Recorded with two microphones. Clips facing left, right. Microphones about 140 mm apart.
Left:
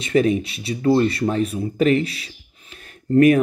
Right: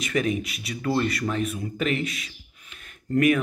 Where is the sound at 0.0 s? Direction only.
30° left (ahead or behind).